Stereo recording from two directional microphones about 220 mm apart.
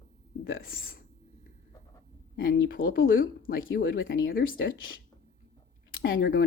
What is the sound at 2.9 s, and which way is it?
Speech, 40° left (ahead or behind).